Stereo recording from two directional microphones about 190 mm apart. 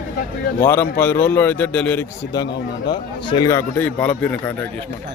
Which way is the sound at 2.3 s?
20° left (ahead or behind).